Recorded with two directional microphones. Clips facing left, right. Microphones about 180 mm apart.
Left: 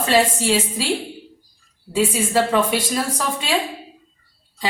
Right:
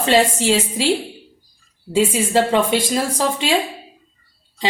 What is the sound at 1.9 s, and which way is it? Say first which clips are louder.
A woman's voice: right 3 dB; 25° right (ahead or behind).